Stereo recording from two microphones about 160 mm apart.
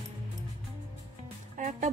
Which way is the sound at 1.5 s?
50° right (ahead or behind).